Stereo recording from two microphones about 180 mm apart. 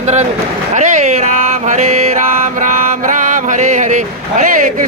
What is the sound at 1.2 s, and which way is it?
Music, 40° right (ahead or behind).